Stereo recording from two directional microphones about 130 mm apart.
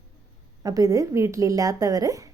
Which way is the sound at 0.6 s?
25° right (ahead or behind).